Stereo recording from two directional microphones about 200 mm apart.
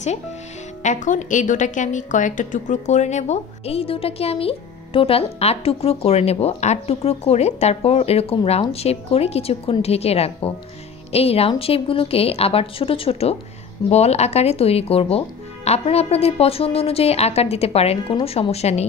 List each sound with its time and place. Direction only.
0.8 s a woman's voice: 40° left (ahead or behind)